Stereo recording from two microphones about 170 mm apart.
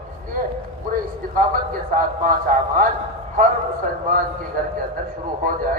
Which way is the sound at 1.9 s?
55° right (ahead or behind).